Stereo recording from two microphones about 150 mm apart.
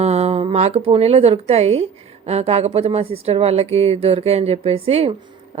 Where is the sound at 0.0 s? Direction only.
45° right (ahead or behind).